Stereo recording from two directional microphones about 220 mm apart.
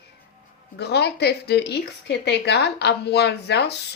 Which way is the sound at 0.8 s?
50° left (ahead or behind).